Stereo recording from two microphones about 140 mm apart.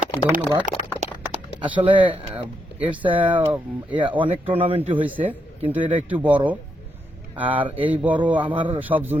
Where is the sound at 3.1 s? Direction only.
35° right (ahead or behind).